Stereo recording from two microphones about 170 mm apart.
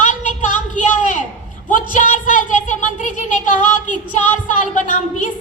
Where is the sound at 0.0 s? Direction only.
45° left (ahead or behind).